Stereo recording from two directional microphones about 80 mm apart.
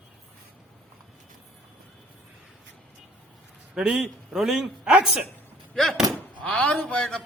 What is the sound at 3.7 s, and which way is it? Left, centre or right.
Speech, centre.